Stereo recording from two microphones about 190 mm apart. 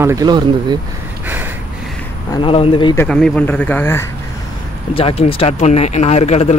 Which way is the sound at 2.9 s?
5° left (ahead or behind).